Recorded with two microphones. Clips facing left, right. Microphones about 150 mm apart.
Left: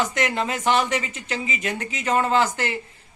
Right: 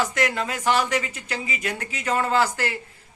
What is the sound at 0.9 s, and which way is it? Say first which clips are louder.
Speech: even; 10° left (ahead or behind).